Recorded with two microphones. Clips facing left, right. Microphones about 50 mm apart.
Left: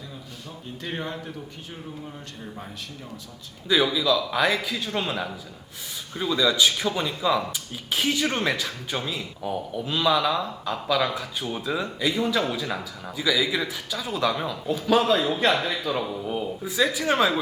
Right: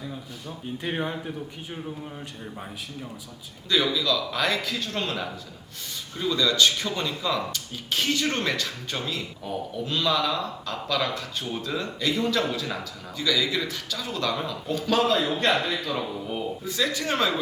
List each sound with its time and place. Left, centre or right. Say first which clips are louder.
0.8 s a man's voice: right 2 dB; centre
3.7 s speech: left 2 dB; centre